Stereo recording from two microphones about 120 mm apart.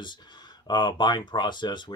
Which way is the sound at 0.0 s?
40° left (ahead or behind).